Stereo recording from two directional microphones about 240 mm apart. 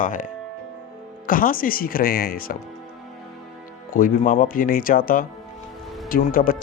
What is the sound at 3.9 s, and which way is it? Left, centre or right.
Speech, left.